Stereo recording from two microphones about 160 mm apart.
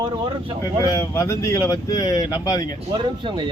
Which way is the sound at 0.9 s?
20° left (ahead or behind).